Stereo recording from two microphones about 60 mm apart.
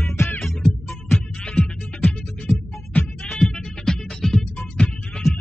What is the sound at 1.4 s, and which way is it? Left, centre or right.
Music, centre.